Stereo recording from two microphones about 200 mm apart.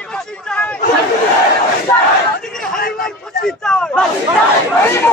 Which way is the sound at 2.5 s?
Centre (ahead or behind).